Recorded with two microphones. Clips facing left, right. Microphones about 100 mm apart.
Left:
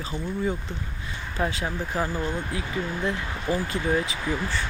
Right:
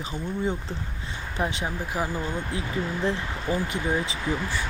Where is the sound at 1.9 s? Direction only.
10° right (ahead or behind).